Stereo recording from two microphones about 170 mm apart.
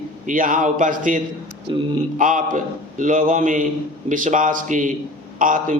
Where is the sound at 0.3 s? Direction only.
55° right (ahead or behind).